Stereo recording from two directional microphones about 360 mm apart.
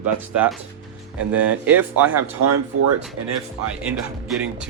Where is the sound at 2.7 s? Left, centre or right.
Right.